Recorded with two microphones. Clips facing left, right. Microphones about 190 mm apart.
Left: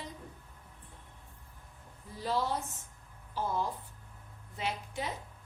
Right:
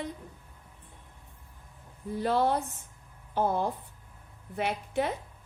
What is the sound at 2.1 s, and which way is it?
A woman's voice, 60° right (ahead or behind).